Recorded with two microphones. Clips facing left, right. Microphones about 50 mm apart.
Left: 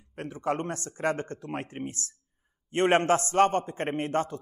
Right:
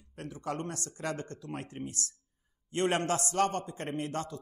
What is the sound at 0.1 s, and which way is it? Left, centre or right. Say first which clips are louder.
A man's voice: left 7 dB; left.